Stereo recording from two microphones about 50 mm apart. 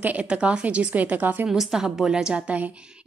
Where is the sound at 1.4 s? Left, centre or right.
Centre.